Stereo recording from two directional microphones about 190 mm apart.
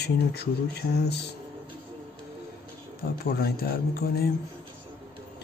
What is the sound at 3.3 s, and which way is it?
Speech, 55° left (ahead or behind).